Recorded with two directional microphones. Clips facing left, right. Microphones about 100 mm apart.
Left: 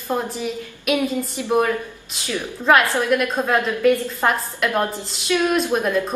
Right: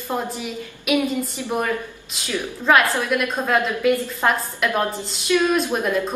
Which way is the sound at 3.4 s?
5° left (ahead or behind).